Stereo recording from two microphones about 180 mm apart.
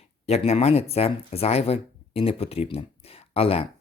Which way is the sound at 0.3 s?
35° left (ahead or behind).